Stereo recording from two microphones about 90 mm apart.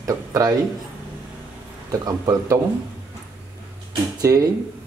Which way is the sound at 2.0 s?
45° right (ahead or behind).